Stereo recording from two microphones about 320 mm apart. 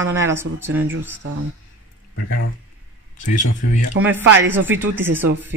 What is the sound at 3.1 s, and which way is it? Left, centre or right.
Speech, left.